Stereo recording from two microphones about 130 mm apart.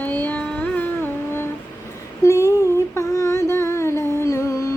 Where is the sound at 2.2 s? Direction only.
20° left (ahead or behind).